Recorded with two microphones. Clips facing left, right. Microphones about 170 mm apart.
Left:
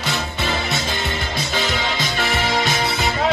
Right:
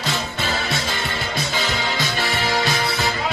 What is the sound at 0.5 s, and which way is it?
Music, 20° left (ahead or behind).